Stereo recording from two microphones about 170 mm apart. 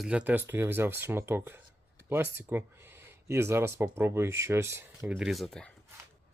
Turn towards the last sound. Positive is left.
turn(degrees=5)  # may be behind; listen again after turning